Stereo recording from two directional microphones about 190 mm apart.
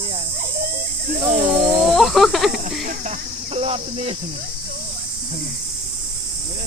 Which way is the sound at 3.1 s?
30° right (ahead or behind).